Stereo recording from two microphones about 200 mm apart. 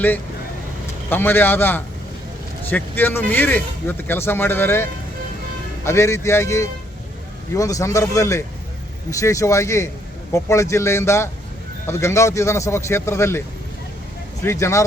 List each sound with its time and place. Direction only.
1.1 s speech: 10° left (ahead or behind)
14.4 s speech: 15° left (ahead or behind)